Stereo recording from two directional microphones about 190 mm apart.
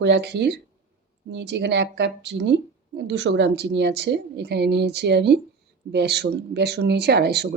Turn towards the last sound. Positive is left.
turn(degrees=-60)  # may be behind; listen again after turning